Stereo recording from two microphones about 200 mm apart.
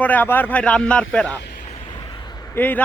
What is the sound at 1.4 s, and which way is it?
Vehicle, 45° left (ahead or behind).